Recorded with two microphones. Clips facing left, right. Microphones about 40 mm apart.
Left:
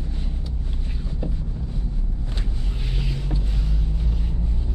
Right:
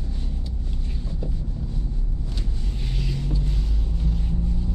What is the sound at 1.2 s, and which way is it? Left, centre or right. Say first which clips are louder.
Wind noise: left 3 dB; left.